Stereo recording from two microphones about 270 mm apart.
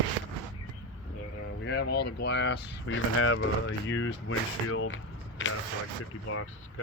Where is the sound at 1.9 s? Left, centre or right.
Left.